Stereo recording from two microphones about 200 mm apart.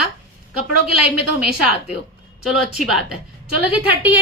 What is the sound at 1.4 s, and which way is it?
A woman's voice, centre (ahead or behind).